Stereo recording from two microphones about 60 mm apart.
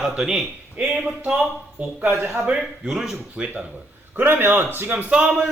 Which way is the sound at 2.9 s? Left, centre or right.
Centre.